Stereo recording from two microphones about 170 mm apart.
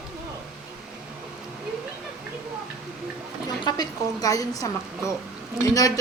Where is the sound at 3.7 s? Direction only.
20° left (ahead or behind).